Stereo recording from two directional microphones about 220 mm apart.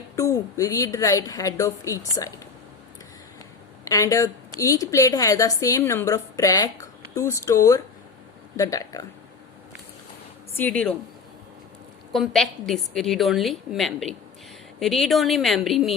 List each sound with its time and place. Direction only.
0.2 s a woman's voice: 15° left (ahead or behind)
3.8 s a woman's voice: 15° left (ahead or behind)
10.6 s a woman's voice: 5° left (ahead or behind)
12.1 s a woman's voice: centre (ahead or behind)